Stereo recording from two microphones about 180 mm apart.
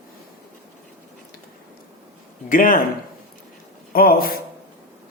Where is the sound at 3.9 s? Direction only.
55° left (ahead or behind).